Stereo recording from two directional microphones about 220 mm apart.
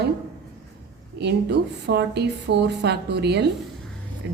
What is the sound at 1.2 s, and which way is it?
A woman's voice, 50° right (ahead or behind).